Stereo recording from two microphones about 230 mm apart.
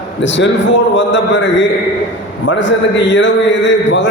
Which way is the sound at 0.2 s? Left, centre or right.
Left.